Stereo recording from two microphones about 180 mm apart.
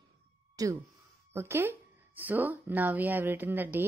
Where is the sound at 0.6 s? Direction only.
15° right (ahead or behind).